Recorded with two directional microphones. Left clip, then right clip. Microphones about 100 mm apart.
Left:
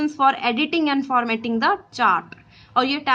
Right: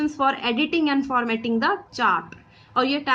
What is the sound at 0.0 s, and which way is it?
A woman's voice, 35° left (ahead or behind).